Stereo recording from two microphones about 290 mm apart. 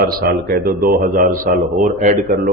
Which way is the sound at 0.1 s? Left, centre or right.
Right.